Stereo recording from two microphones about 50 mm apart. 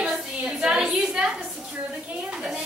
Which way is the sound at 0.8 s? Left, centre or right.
Centre.